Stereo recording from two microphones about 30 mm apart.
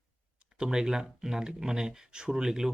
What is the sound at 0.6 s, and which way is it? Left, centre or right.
Speech, right.